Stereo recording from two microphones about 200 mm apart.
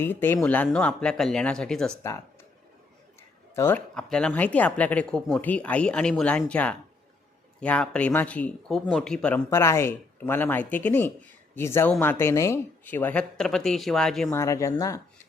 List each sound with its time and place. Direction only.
0.0 s speech: 10° left (ahead or behind)
2.0 s a sound: 15° left (ahead or behind)
3.5 s speech: 10° left (ahead or behind)
14.3 s speech: 15° left (ahead or behind)